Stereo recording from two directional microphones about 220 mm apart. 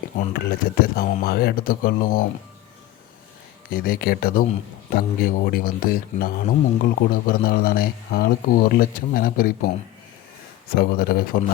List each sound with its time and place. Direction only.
0.2 s speech: 40° left (ahead or behind)
3.7 s speech: 40° left (ahead or behind)
10.8 s speech: 45° left (ahead or behind)